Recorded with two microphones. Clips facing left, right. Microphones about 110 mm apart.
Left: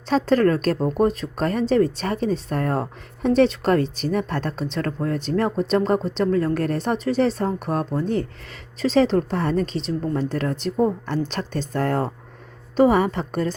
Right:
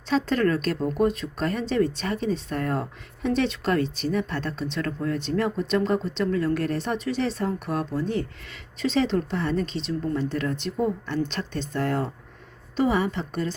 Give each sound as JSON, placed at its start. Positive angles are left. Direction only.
{"t": 0.1, "sound": "a woman's voice", "side_deg": 40}